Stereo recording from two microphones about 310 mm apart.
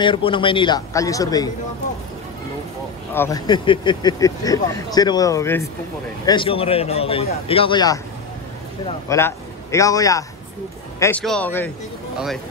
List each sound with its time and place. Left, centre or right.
0.0 s speech: centre
3.1 s a man's voice: centre